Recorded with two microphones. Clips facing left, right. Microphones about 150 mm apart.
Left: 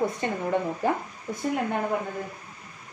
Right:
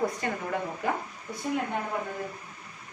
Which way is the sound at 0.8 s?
30° left (ahead or behind).